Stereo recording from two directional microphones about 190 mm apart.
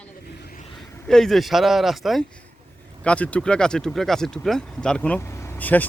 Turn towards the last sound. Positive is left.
turn(degrees=10)  # may be behind; listen again after turning